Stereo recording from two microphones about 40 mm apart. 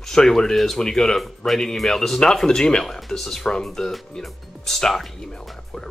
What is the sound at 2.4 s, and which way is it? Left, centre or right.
Speech, left.